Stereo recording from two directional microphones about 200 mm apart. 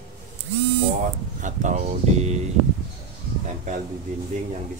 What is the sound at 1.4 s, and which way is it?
Speech, 40° right (ahead or behind).